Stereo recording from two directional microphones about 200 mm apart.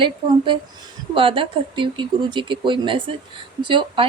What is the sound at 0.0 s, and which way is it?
Speech, 25° right (ahead or behind).